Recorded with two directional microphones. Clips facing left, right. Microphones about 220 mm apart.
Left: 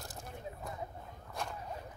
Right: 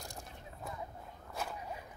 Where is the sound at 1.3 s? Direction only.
5° right (ahead or behind).